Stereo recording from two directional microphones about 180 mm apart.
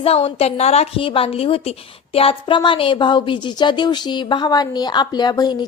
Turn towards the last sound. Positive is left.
turn(degrees=25)  # may be behind; listen again after turning